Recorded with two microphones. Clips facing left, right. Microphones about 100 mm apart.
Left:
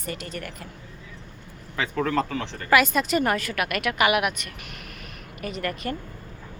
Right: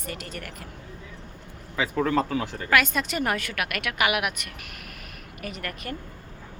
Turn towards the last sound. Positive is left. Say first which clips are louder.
# left 5 dB
turn(degrees=0)  # may be behind; listen again after turning